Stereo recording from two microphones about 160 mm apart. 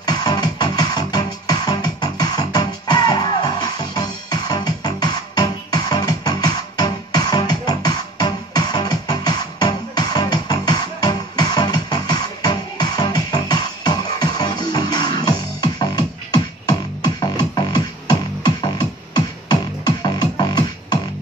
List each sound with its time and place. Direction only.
0.0 s music: 25° left (ahead or behind)